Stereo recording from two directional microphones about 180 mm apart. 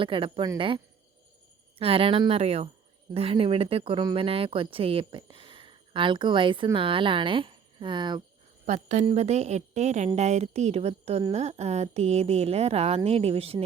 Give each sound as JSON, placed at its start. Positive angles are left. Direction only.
{"t": 0.0, "sound": "speech", "side_deg": -30}
{"t": 1.8, "sound": "a woman's voice", "side_deg": -30}
{"t": 8.6, "sound": "a woman's voice", "side_deg": -40}